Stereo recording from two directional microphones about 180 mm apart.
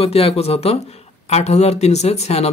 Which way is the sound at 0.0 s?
35° left (ahead or behind).